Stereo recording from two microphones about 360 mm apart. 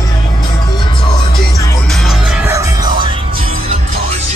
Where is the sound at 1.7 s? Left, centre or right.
Centre.